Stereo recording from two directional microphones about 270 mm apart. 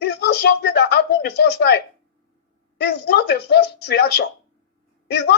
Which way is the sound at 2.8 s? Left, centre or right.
Left.